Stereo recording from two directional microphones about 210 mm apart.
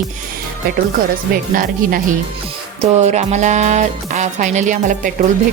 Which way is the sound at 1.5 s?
40° right (ahead or behind).